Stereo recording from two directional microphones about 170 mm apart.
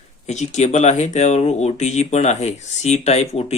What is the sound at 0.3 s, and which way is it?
Speech, 45° left (ahead or behind).